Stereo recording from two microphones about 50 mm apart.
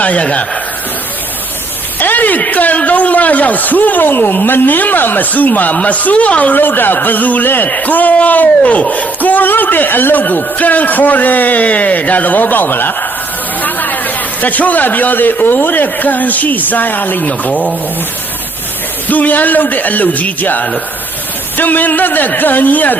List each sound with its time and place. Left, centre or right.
0.0 s speech: left
2.0 s a man's voice: left
19.0 s a man's voice: left